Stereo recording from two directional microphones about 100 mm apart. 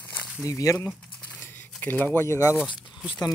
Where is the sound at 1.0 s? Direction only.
15° left (ahead or behind).